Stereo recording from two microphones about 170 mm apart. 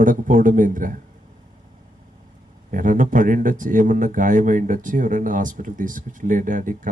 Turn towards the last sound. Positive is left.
turn(degrees=-50)  # may be behind; listen again after turning